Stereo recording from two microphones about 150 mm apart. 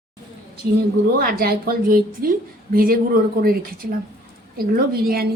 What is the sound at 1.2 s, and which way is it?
A woman's voice, 80° right.